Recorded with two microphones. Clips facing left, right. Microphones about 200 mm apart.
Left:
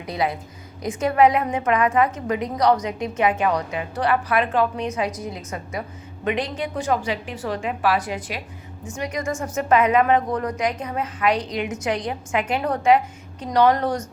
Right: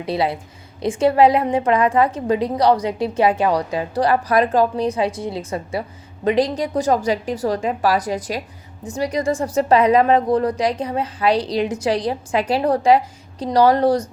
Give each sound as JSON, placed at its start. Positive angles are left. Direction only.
{"t": 0.0, "sound": "a woman's voice", "side_deg": -30}